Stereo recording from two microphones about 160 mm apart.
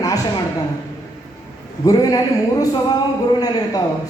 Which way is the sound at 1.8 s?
25° left (ahead or behind).